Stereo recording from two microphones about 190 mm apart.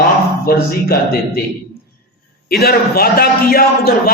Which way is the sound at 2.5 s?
55° left (ahead or behind).